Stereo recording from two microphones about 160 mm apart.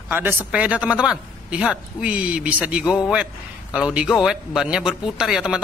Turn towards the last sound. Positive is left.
turn(degrees=-5)  # may be behind; listen again after turning